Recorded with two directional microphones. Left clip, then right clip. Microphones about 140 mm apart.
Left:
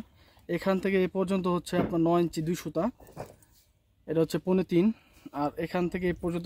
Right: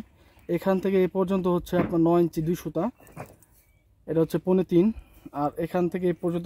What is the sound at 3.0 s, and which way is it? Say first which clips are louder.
Keys jangling: even; 45° left (ahead or behind).